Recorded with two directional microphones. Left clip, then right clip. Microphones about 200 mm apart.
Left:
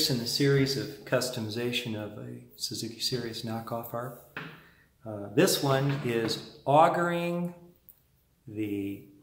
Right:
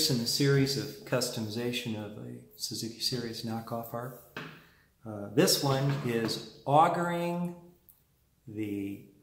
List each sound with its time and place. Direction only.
0.0 s speech: centre (ahead or behind)